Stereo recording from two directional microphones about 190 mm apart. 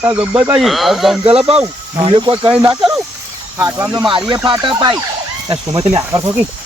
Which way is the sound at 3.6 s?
15° right (ahead or behind).